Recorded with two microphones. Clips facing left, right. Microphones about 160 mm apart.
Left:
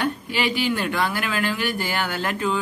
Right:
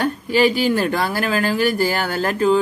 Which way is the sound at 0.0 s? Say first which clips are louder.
Right 7 dB; 40° right (ahead or behind).